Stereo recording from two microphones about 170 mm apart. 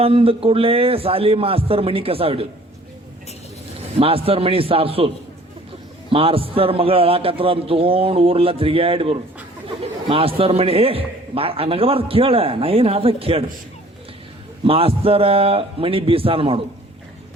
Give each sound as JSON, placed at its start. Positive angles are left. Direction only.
{"t": 0.0, "sound": "a man's voice", "side_deg": -35}
{"t": 4.0, "sound": "a man's voice", "side_deg": -35}
{"t": 14.6, "sound": "a man's voice", "side_deg": -35}